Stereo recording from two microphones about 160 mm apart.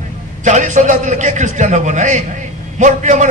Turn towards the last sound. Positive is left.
turn(degrees=-50)  # may be behind; listen again after turning